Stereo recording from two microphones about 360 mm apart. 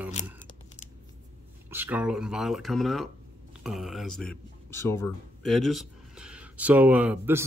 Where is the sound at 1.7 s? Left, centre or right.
Centre.